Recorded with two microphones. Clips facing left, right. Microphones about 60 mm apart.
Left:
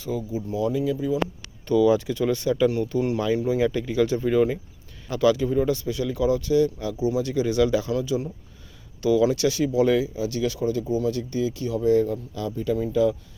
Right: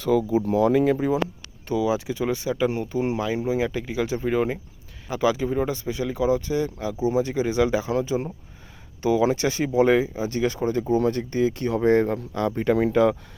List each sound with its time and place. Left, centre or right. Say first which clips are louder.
0.0 s speech: right 8 dB; right
1.6 s speech: left 4 dB; centre; by 13.1 s right